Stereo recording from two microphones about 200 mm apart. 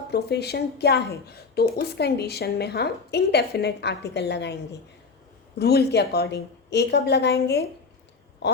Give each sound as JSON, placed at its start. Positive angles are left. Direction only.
{"t": 0.1, "sound": "speech", "side_deg": 55}
{"t": 5.5, "sound": "speech", "side_deg": 55}